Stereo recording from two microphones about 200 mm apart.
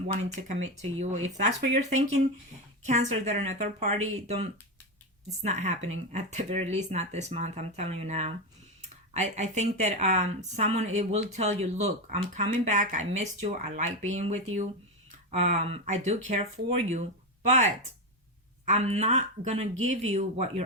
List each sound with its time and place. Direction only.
0.2 s speech: 35° right (ahead or behind)